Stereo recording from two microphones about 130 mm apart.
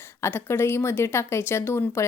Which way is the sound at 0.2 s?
20° left (ahead or behind).